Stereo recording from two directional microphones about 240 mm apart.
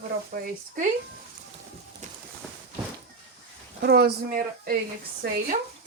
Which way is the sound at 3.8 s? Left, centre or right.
Right.